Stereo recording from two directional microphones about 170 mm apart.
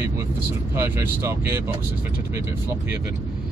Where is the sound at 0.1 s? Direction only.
15° right (ahead or behind).